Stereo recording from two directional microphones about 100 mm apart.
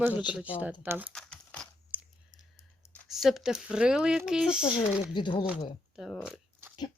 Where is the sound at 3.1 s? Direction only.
5° right (ahead or behind).